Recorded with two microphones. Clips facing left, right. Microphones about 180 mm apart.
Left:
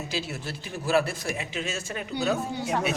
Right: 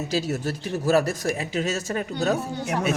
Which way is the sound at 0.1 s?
40° right (ahead or behind).